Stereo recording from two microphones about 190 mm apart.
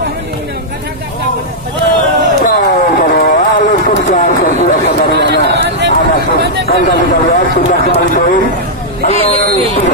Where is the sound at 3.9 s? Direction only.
40° left (ahead or behind).